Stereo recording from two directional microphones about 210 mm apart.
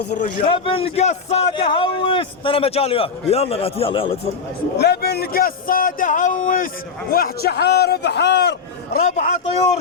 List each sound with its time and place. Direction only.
0.4 s a man's voice: 25° left (ahead or behind)
4.8 s a man's voice: 50° left (ahead or behind)
9.0 s a man's voice: 35° left (ahead or behind)